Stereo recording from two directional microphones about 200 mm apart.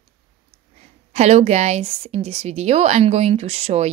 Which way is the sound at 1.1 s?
35° right (ahead or behind).